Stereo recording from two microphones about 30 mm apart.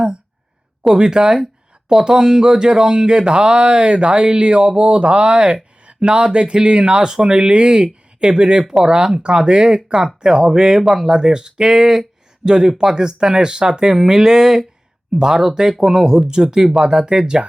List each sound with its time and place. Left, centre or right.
0.9 s speech: right